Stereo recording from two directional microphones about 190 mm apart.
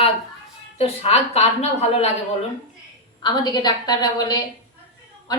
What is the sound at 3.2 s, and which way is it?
A woman's voice, 20° left (ahead or behind).